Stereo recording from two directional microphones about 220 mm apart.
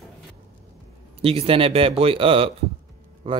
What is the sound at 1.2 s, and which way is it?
Speech, 25° right (ahead or behind).